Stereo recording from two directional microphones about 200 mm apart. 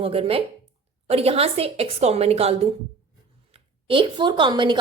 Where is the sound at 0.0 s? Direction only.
30° right (ahead or behind).